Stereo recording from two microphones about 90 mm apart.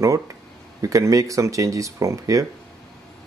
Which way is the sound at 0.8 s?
35° right (ahead or behind).